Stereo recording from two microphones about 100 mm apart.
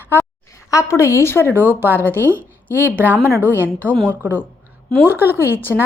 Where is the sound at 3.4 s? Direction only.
20° left (ahead or behind).